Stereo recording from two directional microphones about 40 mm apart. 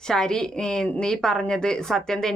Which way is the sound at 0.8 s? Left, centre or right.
Centre.